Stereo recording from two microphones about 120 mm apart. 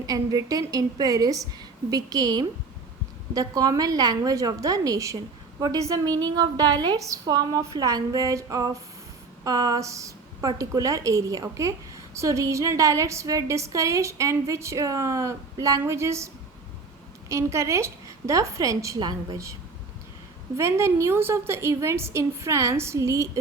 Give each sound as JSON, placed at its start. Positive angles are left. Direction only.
{"t": 0.0, "sound": "a woman's voice", "side_deg": -30}
{"t": 20.6, "sound": "a woman's voice", "side_deg": -20}